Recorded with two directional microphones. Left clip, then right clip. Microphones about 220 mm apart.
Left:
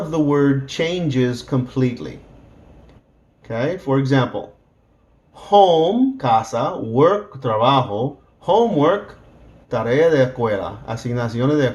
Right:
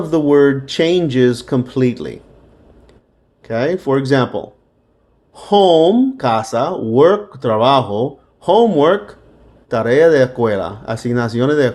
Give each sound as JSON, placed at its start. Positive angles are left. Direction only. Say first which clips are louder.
{"t": 0.1, "sound": "speech", "louder": "right 6 dB", "side_deg": -45}
{"t": 3.4, "sound": "speech", "louder": "right 5 dB", "side_deg": -45}